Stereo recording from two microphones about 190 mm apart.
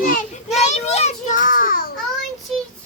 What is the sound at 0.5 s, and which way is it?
Children playing, 35° left (ahead or behind).